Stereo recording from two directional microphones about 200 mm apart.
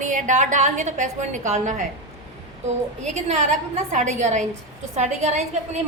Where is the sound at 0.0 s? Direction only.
40° right (ahead or behind).